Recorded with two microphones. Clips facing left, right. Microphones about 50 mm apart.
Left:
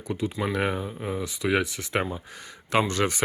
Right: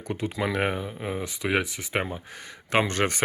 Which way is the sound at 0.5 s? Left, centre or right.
Right.